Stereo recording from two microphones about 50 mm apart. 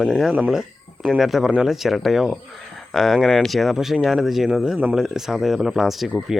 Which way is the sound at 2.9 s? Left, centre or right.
Centre.